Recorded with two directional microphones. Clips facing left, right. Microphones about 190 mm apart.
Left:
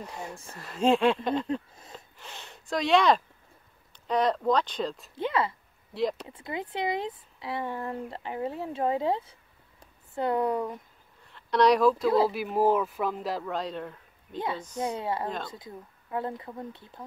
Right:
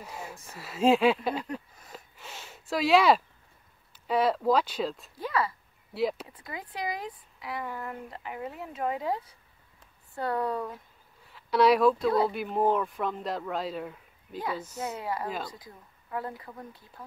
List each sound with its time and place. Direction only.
0.0 s speech: 5° right (ahead or behind)
1.5 s speech: 25° left (ahead or behind)
2.1 s speech: 5° right (ahead or behind)
5.1 s speech: 25° left (ahead or behind)
5.9 s speech: 5° right (ahead or behind)
6.2 s speech: 25° left (ahead or behind)
11.2 s speech: 5° right (ahead or behind)
14.8 s speech: 30° left (ahead or behind)
15.2 s speech: 5° right (ahead or behind)
15.5 s speech: 25° left (ahead or behind)